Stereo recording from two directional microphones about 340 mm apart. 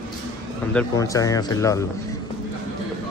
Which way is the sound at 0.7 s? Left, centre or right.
Centre.